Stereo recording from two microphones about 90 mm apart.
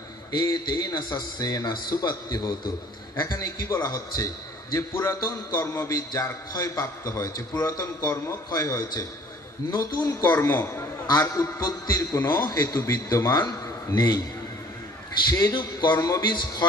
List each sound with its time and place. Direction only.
0.3 s a man's voice: 50° left (ahead or behind)
10.2 s a woman's voice: 25° left (ahead or behind)
11.1 s a man's voice: 40° left (ahead or behind)
15.2 s a man's voice: 50° left (ahead or behind)